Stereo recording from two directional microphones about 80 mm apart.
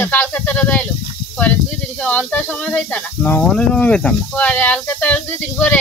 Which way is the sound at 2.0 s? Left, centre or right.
Centre.